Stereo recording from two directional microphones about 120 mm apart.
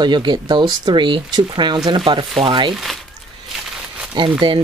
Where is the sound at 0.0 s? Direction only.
40° right (ahead or behind).